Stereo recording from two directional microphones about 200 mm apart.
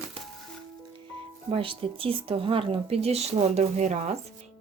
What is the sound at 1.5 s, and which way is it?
Speech, 25° right (ahead or behind).